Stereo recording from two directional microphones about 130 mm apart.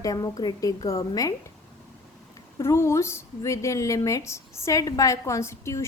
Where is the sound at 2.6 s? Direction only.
20° left (ahead or behind).